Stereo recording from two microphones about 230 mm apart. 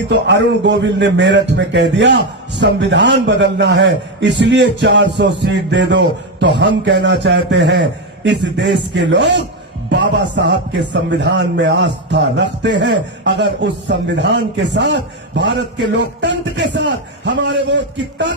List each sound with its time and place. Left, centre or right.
0.1 s a man's voice: right